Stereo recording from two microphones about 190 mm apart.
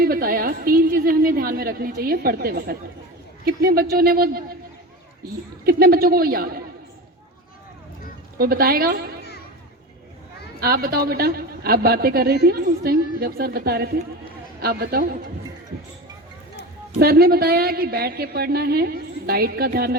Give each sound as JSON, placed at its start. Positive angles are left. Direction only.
{"t": 0.0, "sound": "a woman's voice", "side_deg": -50}
{"t": 5.6, "sound": "a woman's voice", "side_deg": -50}
{"t": 8.4, "sound": "a woman's voice", "side_deg": -50}
{"t": 10.6, "sound": "a woman's voice", "side_deg": -55}
{"t": 17.0, "sound": "a woman's voice", "side_deg": -55}